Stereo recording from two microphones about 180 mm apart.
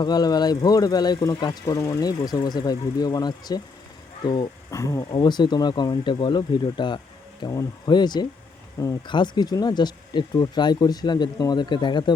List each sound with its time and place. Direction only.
0.0 s speech: 20° left (ahead or behind)